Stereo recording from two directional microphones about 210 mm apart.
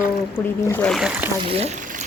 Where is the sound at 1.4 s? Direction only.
25° right (ahead or behind).